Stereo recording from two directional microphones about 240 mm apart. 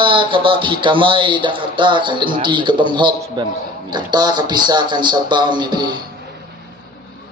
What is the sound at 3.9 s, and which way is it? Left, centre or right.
Speech, centre.